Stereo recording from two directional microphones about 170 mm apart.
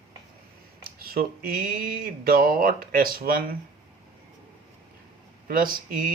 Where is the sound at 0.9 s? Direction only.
60° right (ahead or behind).